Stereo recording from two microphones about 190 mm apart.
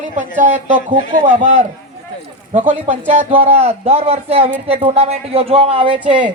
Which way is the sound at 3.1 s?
30° right (ahead or behind).